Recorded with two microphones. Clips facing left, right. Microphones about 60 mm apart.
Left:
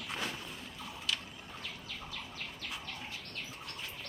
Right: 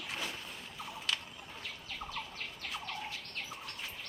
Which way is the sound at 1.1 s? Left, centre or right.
Right.